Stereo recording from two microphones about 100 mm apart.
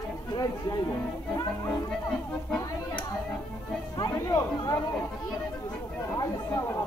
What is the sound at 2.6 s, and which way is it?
Music, 35° left (ahead or behind).